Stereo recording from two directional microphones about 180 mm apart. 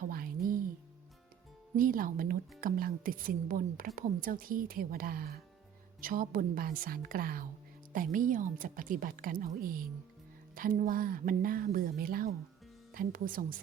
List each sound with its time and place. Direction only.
0.1 s music: 55° right (ahead or behind)
1.7 s a woman's voice: 50° right (ahead or behind)